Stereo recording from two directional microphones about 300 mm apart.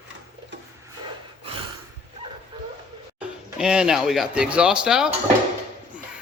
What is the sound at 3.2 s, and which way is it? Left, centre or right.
Speech, centre.